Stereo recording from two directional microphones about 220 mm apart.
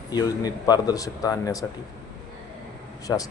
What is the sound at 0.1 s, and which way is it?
Speech, 15° left (ahead or behind).